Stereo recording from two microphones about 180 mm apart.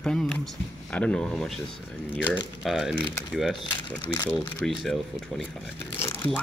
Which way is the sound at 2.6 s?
Centre (ahead or behind).